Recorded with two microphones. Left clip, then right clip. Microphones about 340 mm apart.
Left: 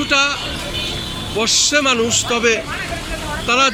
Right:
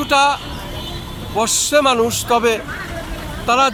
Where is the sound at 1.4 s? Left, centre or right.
Centre.